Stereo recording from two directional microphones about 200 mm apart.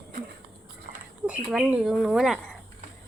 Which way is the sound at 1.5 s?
5° right (ahead or behind).